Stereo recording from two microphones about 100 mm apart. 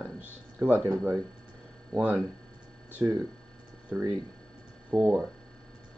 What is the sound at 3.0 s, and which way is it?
Speech, 25° right (ahead or behind).